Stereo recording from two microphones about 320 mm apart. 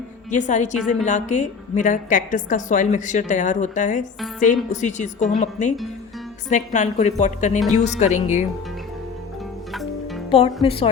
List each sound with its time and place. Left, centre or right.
0.3 s a woman's voice: left
9.7 s music: centre
10.3 s speech: centre